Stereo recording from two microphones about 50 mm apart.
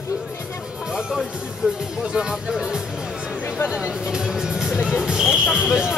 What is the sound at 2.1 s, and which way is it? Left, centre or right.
Speech, centre.